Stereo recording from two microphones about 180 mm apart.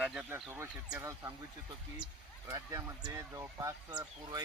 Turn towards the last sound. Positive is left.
turn(degrees=-25)  # may be behind; listen again after turning